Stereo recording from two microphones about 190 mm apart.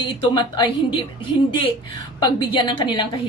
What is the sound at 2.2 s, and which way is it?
Speech, 25° left (ahead or behind).